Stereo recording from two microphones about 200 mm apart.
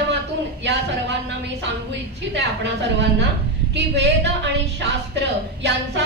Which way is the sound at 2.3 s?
60° right (ahead or behind).